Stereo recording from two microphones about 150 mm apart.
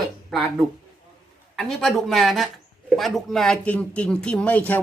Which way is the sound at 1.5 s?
5° left (ahead or behind).